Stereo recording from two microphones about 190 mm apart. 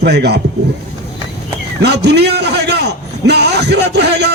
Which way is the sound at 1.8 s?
60° right (ahead or behind).